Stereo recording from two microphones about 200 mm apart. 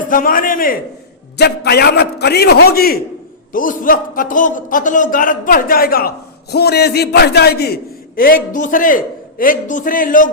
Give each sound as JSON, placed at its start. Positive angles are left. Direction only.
{"t": 0.1, "sound": "a man's voice", "side_deg": 45}